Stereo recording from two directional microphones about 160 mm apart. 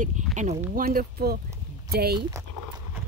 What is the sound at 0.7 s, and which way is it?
Speech, 70° right (ahead or behind).